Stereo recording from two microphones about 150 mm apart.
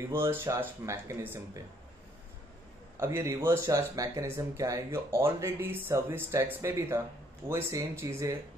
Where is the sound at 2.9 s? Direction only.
20° right (ahead or behind).